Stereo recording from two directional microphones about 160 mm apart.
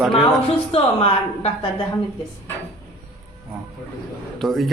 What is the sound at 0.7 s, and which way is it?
Speech, 35° left (ahead or behind).